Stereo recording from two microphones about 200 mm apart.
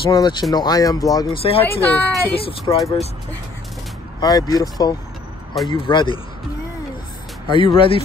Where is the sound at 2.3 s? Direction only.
25° left (ahead or behind).